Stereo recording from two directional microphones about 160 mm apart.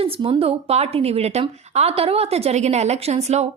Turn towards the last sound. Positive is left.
turn(degrees=-45)  # may be behind; listen again after turning